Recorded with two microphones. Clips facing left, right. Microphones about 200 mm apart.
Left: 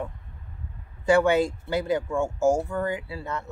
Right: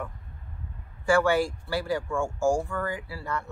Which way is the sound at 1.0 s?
20° left (ahead or behind).